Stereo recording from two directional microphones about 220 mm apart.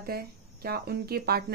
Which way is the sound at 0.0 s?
45° right (ahead or behind).